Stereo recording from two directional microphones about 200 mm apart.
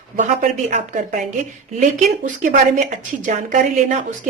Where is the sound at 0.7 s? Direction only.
40° right (ahead or behind).